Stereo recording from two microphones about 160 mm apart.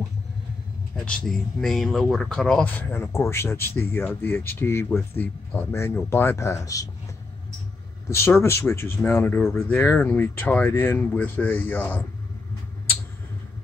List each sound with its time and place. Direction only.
0.9 s speech: 5° left (ahead or behind); by 6.9 s 20° left (ahead or behind)
8.1 s speech: 15° left (ahead or behind)